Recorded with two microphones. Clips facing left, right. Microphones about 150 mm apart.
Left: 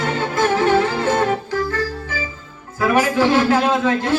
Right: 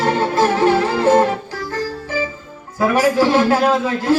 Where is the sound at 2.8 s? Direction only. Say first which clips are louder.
Right 2 dB; 35° right (ahead or behind).